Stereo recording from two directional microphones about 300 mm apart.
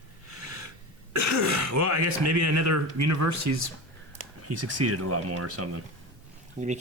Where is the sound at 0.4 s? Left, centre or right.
Right.